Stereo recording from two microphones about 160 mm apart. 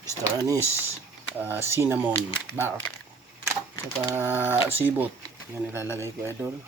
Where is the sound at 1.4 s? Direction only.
15° right (ahead or behind).